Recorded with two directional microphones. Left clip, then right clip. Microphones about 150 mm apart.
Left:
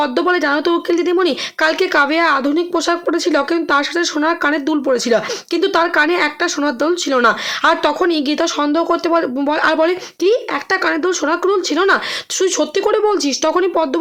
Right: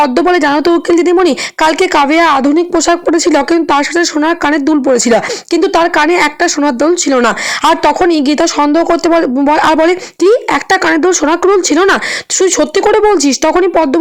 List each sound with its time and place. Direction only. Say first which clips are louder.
0.0 s speech: right 6 dB; 45° right (ahead or behind)